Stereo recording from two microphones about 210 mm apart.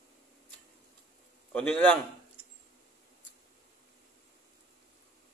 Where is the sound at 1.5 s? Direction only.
5° left (ahead or behind).